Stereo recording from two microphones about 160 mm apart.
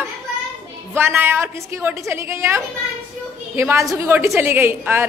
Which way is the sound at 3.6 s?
15° right (ahead or behind).